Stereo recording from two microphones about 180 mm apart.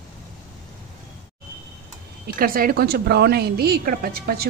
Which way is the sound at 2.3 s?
55° right (ahead or behind).